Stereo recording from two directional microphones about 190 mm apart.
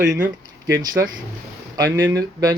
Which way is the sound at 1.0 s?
10° right (ahead or behind).